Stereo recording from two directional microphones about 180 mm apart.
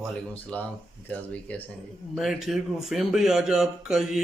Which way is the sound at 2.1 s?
Centre (ahead or behind).